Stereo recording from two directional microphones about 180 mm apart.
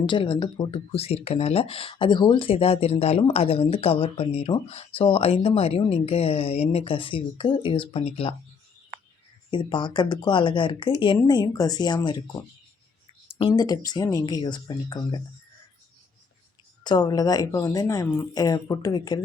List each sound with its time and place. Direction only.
0.0 s speech: 30° left (ahead or behind)
9.5 s speech: 25° left (ahead or behind)
16.8 s speech: 25° left (ahead or behind)